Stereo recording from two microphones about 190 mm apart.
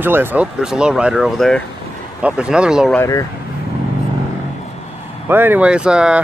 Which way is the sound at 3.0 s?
15° left (ahead or behind).